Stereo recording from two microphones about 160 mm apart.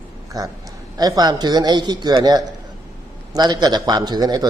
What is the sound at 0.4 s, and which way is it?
A man's voice, 25° right (ahead or behind).